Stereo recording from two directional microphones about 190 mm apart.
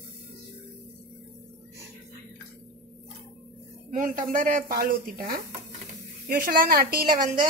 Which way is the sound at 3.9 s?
45° right (ahead or behind).